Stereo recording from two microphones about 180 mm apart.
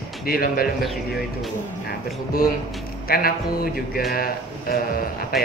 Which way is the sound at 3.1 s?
55° left (ahead or behind).